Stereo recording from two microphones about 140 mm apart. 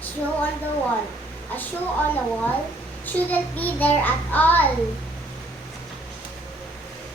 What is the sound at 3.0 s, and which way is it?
A child's voice, 10° left (ahead or behind).